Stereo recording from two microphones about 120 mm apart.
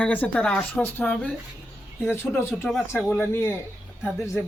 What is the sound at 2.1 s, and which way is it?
Speech, 20° left (ahead or behind).